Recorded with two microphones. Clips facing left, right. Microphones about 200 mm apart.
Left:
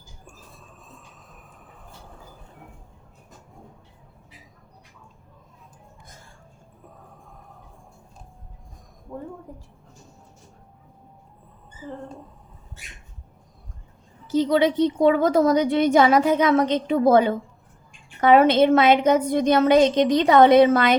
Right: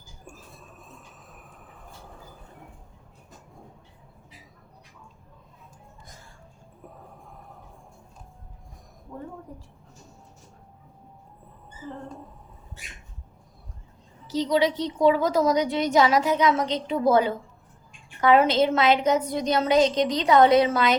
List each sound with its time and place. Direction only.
14.3 s a woman's voice: 55° left (ahead or behind)
18.3 s a woman's voice: 55° left (ahead or behind)